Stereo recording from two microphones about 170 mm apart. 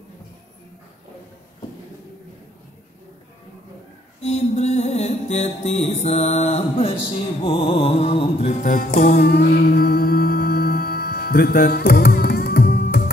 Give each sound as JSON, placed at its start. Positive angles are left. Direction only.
{"t": 4.2, "sound": "music", "side_deg": 40}